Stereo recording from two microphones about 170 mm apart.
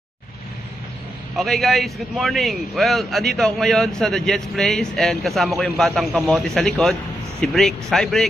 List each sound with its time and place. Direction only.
1.3 s a man's voice: centre (ahead or behind)